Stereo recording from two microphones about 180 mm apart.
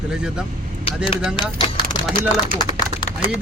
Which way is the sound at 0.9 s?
35° left (ahead or behind).